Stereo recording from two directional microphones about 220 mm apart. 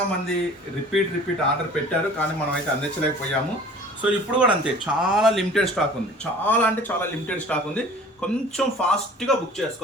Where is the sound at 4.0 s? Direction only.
5° right (ahead or behind).